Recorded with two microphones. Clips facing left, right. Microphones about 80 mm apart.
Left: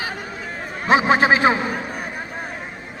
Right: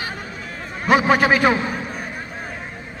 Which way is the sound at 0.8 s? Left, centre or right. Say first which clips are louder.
Even; centre.